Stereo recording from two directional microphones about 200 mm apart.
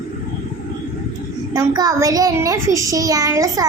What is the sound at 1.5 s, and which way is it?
A woman's voice, 20° right (ahead or behind).